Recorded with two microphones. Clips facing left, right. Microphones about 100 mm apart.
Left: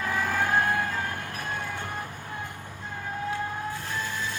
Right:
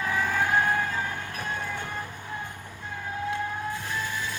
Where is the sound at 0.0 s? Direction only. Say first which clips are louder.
Right 1 dB; 10° right (ahead or behind).